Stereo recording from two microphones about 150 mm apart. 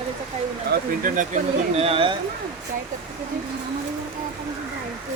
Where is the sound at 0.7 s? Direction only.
65° right (ahead or behind).